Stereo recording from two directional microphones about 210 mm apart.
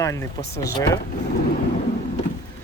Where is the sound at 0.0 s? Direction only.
15° left (ahead or behind).